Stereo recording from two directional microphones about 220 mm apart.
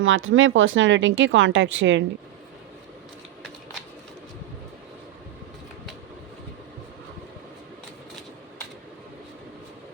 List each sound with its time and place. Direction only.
0.0 s speech: 65° right (ahead or behind)